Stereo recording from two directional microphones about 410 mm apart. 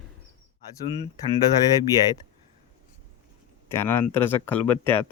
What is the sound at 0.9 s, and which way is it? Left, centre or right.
Speech, centre.